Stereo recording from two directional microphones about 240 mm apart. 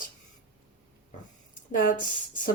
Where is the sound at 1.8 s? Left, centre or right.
Left.